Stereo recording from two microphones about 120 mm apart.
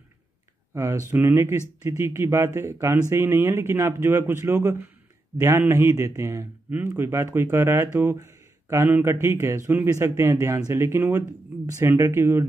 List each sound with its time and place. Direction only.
0.7 s speech: 25° right (ahead or behind)